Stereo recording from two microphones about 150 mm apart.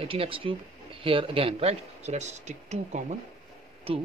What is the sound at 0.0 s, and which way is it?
Speech, 40° right (ahead or behind).